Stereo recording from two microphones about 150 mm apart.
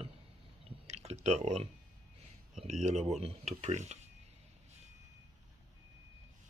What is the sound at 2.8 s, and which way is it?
Speech, 45° right (ahead or behind).